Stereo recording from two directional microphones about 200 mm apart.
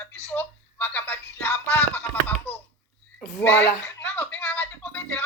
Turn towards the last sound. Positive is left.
turn(degrees=10)  # may be behind; listen again after turning